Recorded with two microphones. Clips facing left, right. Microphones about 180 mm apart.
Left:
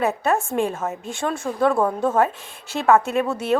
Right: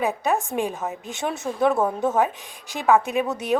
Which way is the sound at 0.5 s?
15° right (ahead or behind).